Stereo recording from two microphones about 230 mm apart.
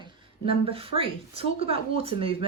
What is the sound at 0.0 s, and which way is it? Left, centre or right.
A woman's voice, right.